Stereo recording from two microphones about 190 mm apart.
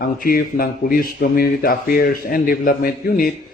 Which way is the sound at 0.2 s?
50° left (ahead or behind).